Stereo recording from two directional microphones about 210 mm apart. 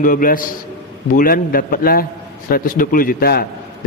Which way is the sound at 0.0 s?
40° left (ahead or behind).